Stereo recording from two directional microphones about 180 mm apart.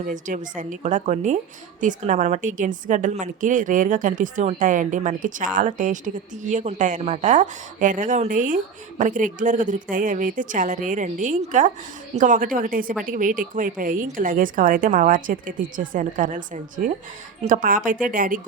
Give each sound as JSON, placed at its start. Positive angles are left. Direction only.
{"t": 0.0, "sound": "a woman's voice", "side_deg": -45}